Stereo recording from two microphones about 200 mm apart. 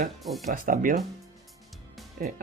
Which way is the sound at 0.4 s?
40° right (ahead or behind).